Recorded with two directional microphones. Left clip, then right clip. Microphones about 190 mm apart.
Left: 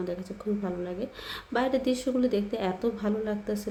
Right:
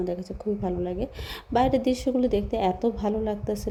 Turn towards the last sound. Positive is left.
turn(degrees=-25)  # may be behind; listen again after turning